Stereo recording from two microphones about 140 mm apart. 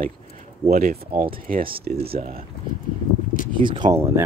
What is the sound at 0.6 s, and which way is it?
Speech, 65° right (ahead or behind).